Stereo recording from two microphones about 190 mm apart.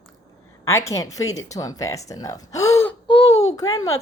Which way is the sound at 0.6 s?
15° left (ahead or behind).